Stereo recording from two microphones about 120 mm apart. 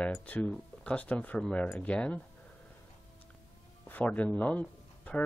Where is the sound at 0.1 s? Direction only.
10° left (ahead or behind).